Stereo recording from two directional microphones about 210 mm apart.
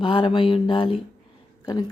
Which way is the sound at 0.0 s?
25° left (ahead or behind).